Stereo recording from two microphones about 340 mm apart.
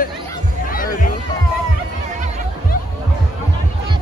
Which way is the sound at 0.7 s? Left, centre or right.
Left.